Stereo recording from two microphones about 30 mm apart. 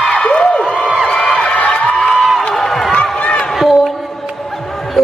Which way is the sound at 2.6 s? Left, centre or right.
Centre.